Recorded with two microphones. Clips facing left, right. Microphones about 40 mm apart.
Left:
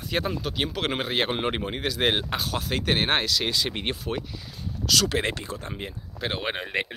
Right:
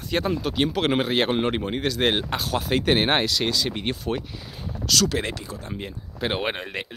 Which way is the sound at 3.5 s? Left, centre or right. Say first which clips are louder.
Right 2 dB; centre.